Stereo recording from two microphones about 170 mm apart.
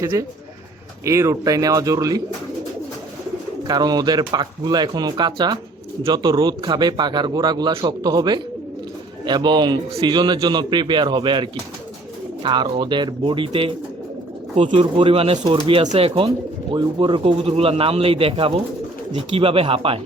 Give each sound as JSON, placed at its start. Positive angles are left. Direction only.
{"t": 0.0, "sound": "speech", "side_deg": -15}
{"t": 3.7, "sound": "speech", "side_deg": -25}